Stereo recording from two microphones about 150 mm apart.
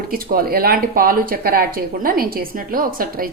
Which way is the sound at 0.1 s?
75° right (ahead or behind).